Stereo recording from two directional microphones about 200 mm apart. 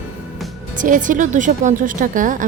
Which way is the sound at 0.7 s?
40° right (ahead or behind).